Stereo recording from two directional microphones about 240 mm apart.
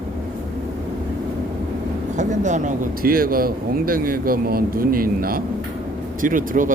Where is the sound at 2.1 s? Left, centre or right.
Right.